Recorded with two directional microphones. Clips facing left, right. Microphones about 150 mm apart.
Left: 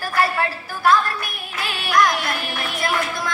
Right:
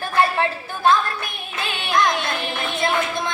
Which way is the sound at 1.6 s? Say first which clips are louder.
Left 2 dB; 25° right (ahead or behind).